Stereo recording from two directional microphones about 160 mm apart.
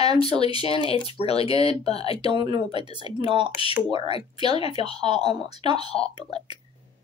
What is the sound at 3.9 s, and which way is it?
A woman's voice, 35° left (ahead or behind).